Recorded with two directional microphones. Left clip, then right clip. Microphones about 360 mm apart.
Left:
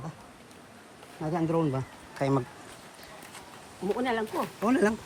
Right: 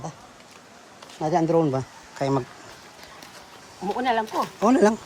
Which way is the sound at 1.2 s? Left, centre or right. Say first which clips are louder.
Right 8 dB; centre.